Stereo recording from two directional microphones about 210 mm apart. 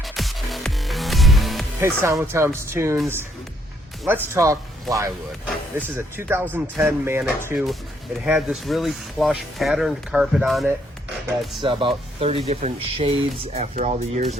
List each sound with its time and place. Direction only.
0.0 s music: centre (ahead or behind)
1.8 s speech: 15° right (ahead or behind)
4.0 s speech: 15° right (ahead or behind)
11.6 s speech: 25° right (ahead or behind)